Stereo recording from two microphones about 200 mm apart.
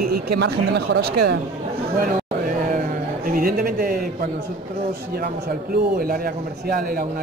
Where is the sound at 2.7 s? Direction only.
40° right (ahead or behind).